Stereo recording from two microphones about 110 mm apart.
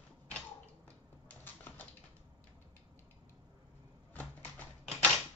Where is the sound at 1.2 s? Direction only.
15° left (ahead or behind).